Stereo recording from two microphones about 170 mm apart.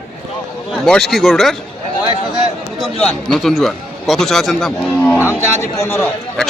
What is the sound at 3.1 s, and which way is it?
Speech, 5° left (ahead or behind).